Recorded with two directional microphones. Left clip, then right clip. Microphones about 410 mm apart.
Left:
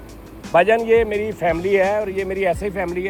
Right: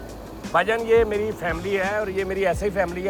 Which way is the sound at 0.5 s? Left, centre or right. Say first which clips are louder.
Left 4 dB; centre.